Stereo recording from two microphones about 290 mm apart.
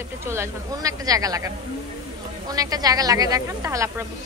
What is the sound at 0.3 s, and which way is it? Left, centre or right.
Speech, centre.